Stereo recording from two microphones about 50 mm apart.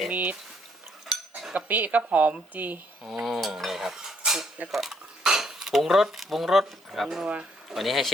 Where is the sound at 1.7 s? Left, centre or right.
Right.